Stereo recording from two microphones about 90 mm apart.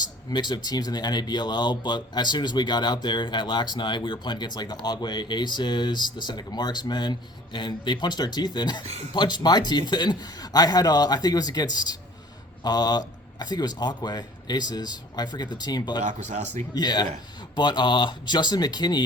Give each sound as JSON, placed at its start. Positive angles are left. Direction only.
{"t": 0.0, "sound": "speech", "side_deg": 50}